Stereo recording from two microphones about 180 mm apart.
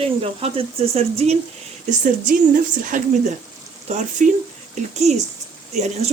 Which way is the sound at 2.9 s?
45° right (ahead or behind).